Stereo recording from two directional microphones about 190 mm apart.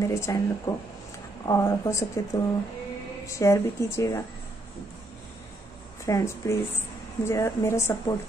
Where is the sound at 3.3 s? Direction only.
15° left (ahead or behind).